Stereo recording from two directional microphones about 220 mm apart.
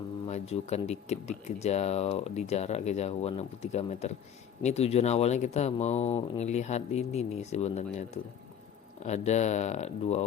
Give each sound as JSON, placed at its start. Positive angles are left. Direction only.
{"t": 0.3, "sound": "speech", "side_deg": 30}